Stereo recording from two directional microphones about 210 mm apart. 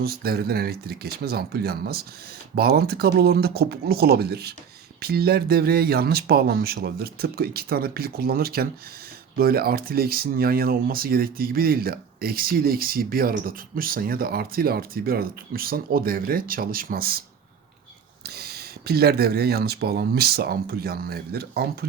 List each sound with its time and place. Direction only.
0.0 s speech: 45° right (ahead or behind)